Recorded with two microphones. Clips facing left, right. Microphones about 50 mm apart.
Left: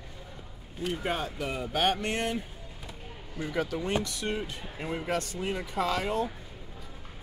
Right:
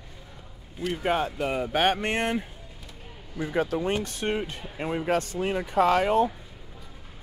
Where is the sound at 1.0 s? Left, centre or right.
Right.